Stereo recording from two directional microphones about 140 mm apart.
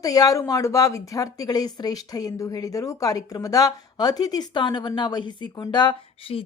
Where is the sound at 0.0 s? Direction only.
25° left (ahead or behind).